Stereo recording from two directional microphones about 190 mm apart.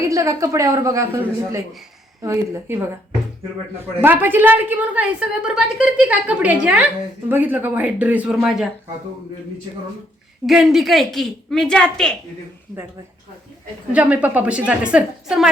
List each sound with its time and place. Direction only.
0.1 s a woman's voice: 15° right (ahead or behind)
2.2 s a woman's voice: 15° right (ahead or behind)
4.0 s a woman's voice: 10° right (ahead or behind)
10.4 s a woman's voice: centre (ahead or behind)
13.9 s a woman's voice: 10° right (ahead or behind)